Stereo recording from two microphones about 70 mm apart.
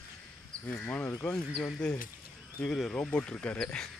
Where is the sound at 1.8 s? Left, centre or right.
Centre.